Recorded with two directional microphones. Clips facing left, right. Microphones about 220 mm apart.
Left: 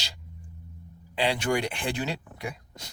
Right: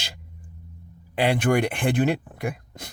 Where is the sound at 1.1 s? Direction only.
55° right (ahead or behind).